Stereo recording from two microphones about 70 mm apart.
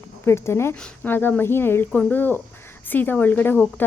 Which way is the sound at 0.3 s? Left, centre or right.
Left.